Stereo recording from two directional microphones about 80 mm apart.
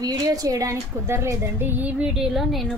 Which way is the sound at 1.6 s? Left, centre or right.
Right.